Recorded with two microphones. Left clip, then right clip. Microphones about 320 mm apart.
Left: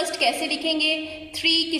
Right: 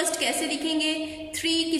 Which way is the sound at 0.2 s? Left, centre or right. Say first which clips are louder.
Left 4 dB; right.